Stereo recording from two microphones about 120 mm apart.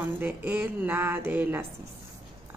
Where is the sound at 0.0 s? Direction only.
15° right (ahead or behind).